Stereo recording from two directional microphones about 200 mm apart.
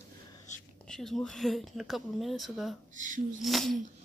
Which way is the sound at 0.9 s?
Centre (ahead or behind).